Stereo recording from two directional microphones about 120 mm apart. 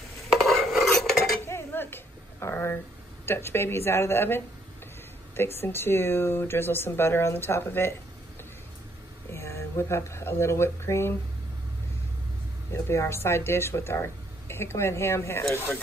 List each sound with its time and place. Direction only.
0.4 s cutlery: centre (ahead or behind)
1.4 s dishes: 20° left (ahead or behind)
2.4 s a sound: 20° left (ahead or behind)
3.3 s speech: 20° left (ahead or behind)
9.3 s speech: 20° left (ahead or behind)
12.7 s speech: 25° left (ahead or behind)